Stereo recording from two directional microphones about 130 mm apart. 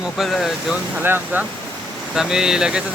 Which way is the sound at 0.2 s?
Centre (ahead or behind).